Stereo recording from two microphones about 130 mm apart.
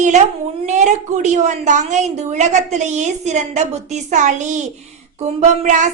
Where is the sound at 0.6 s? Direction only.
65° right (ahead or behind).